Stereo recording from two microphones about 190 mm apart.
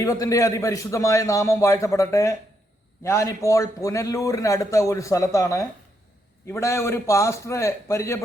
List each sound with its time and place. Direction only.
0.0 s a man's voice: 15° left (ahead or behind)